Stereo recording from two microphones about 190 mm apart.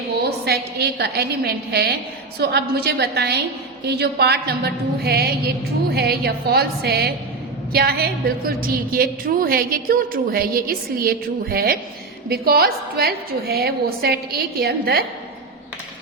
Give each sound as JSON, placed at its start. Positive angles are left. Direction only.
{"t": 0.4, "sound": "a woman's voice", "side_deg": -60}